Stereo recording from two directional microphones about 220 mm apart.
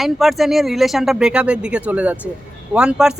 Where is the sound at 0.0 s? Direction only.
Centre (ahead or behind).